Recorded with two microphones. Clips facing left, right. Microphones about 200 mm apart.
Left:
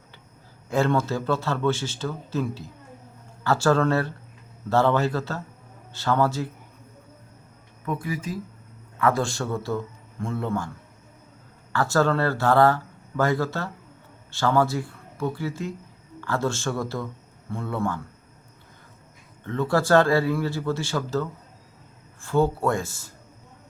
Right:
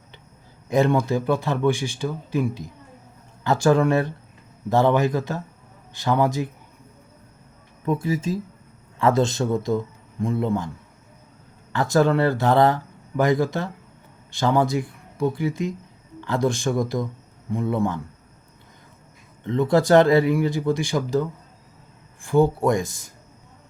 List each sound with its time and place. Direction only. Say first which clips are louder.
0.7 s speech: right 3 dB; 15° right (ahead or behind)
7.9 s a man's voice: right 6 dB; 25° right (ahead or behind)
11.7 s speech: right 3 dB; 20° right (ahead or behind)
19.5 s speech: right 4 dB; 20° right (ahead or behind)